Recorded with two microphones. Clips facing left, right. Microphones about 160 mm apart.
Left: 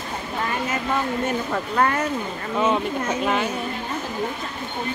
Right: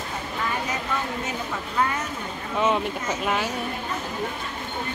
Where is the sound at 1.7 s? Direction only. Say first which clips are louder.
Left 4 dB; 60° left (ahead or behind).